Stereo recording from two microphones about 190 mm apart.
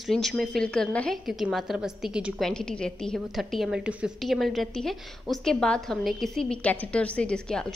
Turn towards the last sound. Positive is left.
turn(degrees=5)  # may be behind; listen again after turning